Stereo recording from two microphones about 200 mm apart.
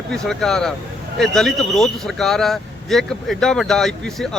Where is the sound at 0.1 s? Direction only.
Centre (ahead or behind).